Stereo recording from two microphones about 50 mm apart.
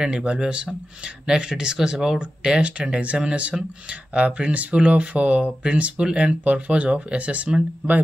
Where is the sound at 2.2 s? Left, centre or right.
Right.